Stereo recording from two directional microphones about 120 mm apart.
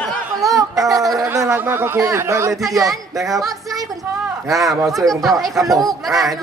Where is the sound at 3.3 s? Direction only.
30° right (ahead or behind).